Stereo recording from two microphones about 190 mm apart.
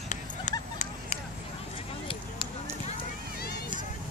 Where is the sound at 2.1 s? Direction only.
30° left (ahead or behind).